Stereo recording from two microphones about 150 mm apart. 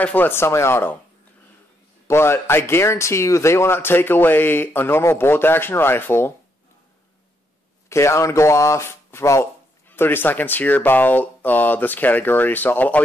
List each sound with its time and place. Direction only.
0.0 s speech: 10° left (ahead or behind)
2.0 s speech: 15° left (ahead or behind)
7.9 s speech: 20° left (ahead or behind)